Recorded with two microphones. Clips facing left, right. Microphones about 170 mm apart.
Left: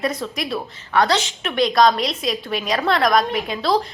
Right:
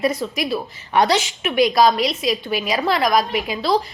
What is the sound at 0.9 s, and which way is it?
A woman's voice, 10° right (ahead or behind).